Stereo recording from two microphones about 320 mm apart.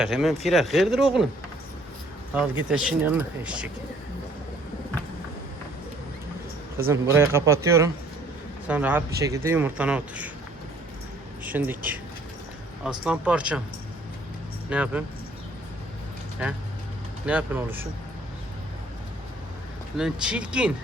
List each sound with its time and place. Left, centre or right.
0.0 s speech: centre
2.6 s speech: centre
6.7 s a man's voice: centre
11.4 s speech: centre
12.8 s speech: centre
14.7 s speech: centre
17.2 s speech: centre
20.0 s speech: centre